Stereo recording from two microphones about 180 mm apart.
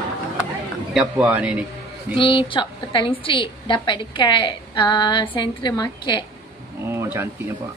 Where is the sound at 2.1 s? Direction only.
30° left (ahead or behind).